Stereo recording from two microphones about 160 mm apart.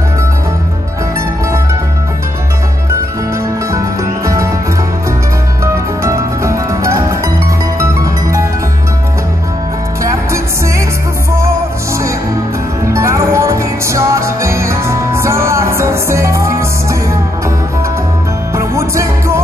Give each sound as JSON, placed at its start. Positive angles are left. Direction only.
{"t": 3.7, "sound": "music", "side_deg": -20}
{"t": 5.6, "sound": "music", "side_deg": -20}
{"t": 12.8, "sound": "music", "side_deg": -20}
{"t": 18.6, "sound": "music", "side_deg": -20}